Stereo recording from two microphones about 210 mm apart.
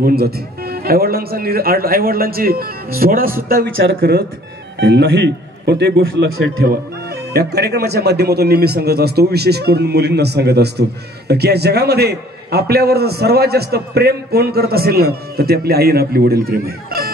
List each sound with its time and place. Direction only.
0.0 s speech: 50° right (ahead or behind)
4.7 s speech: 55° right (ahead or behind)
6.3 s speech: 90° right
6.6 s speech: 50° right (ahead or behind)